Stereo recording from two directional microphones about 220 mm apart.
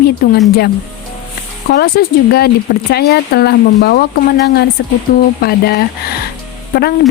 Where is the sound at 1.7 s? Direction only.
45° left (ahead or behind).